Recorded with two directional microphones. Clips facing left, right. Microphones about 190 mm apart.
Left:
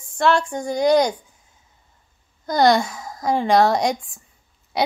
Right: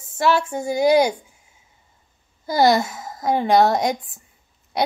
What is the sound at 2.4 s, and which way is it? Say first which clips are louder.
A woman's voice: even; 5° right (ahead or behind).